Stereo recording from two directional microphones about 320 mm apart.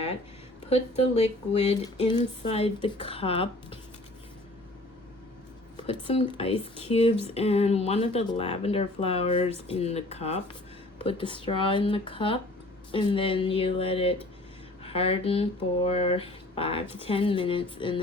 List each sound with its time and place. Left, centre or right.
0.7 s speech: centre
5.7 s speech: centre